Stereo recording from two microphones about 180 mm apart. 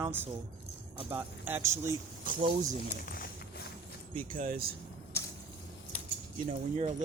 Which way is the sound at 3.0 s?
55° left (ahead or behind).